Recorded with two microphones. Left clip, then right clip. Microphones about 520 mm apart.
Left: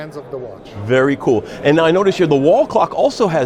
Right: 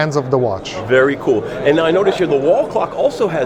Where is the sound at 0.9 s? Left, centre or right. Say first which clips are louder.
Right 1 dB; left.